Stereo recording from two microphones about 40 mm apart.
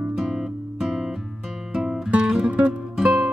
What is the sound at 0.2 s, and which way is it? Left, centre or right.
Guitar, centre.